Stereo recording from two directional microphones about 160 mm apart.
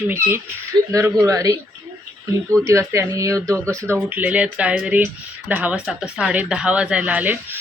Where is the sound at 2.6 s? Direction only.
20° right (ahead or behind).